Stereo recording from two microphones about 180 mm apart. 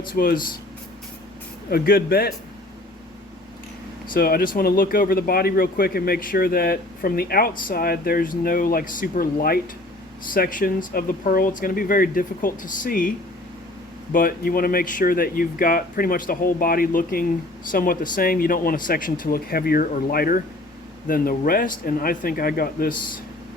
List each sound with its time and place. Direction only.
0.1 s speech: 55° left (ahead or behind)
1.7 s a man's voice: 60° left (ahead or behind)
4.1 s a man's voice: 55° left (ahead or behind)